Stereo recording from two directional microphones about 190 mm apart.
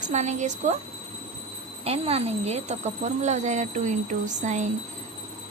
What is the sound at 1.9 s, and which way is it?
A woman's voice, 30° right (ahead or behind).